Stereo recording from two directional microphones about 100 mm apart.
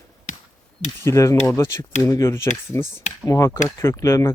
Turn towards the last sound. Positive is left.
turn(degrees=30)  # may be behind; listen again after turning